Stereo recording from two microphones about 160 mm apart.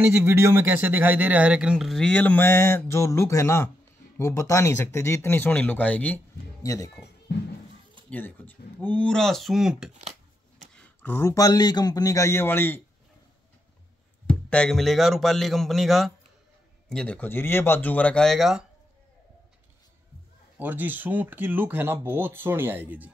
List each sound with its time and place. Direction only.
0.1 s speech: 15° right (ahead or behind); by 7.1 s 20° left (ahead or behind)
8.1 s speech: 10° left (ahead or behind)
10.7 s speech: 10° left (ahead or behind)
14.2 s speech: 5° left (ahead or behind)
20.5 s speech: 10° right (ahead or behind)